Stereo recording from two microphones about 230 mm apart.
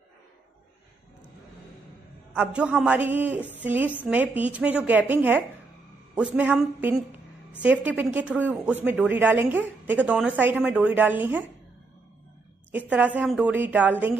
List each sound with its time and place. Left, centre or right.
2.3 s a man's voice: centre
12.7 s speech: centre